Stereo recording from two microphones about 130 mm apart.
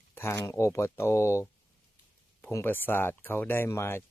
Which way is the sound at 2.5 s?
15° left (ahead or behind).